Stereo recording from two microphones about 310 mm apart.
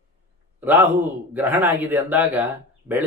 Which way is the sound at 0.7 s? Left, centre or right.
Centre.